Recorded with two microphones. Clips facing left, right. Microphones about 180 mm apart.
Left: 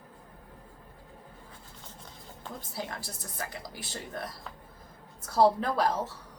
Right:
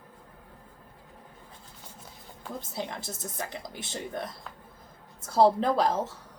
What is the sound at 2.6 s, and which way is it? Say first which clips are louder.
A woman's voice: right 3 dB; 20° right (ahead or behind).